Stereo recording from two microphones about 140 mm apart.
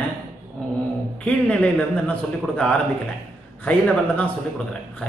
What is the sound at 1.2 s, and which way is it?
A man's voice, 10° left (ahead or behind).